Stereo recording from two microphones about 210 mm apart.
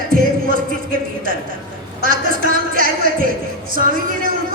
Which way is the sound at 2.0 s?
40° right (ahead or behind).